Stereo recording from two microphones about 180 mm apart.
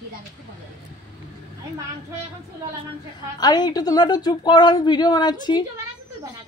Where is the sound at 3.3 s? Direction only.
20° left (ahead or behind).